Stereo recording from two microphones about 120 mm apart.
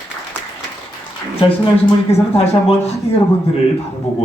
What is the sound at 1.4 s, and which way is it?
Speech, 50° left (ahead or behind).